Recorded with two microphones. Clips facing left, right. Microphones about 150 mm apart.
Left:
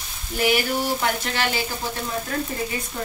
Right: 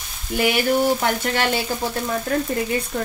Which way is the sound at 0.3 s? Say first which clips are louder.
Right 3 dB; 65° right (ahead or behind).